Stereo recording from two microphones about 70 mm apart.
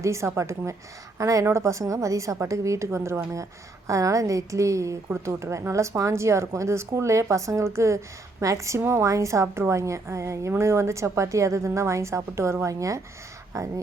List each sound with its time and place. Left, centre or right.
0.0 s a woman's voice: right